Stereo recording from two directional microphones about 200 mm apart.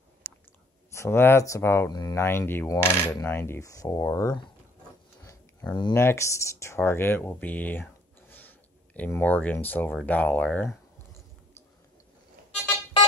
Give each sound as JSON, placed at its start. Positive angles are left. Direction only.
{"t": 0.2, "sound": "chewing", "side_deg": -50}
{"t": 0.9, "sound": "speech", "side_deg": 10}